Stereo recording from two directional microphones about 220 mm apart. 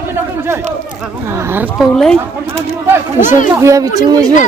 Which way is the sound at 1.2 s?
10° right (ahead or behind).